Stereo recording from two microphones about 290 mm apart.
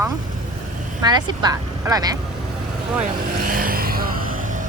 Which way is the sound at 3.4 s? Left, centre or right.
Right.